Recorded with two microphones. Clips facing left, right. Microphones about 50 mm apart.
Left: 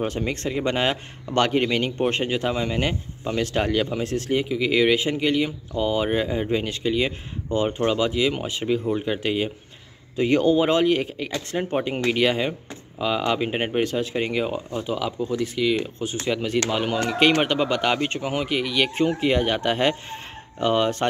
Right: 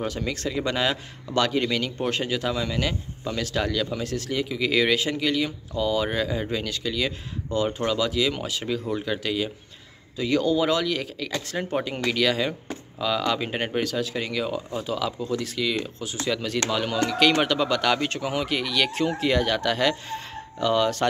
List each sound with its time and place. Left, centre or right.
0.0 s speech: left
4.5 s speech: centre
11.3 s speech: centre